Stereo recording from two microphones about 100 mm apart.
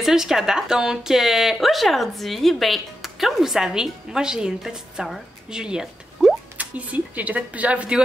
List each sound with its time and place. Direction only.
0.0 s a woman's voice: 5° right (ahead or behind)